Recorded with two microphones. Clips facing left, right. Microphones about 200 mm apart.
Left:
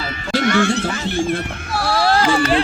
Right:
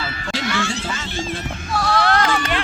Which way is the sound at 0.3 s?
55° left (ahead or behind).